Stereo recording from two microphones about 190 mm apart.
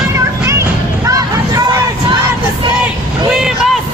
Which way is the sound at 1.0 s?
15° right (ahead or behind).